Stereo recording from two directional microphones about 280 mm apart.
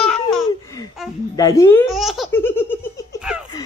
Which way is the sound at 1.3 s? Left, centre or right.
Centre.